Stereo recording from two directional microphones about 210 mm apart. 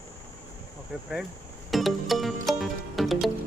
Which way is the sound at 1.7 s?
Centre (ahead or behind).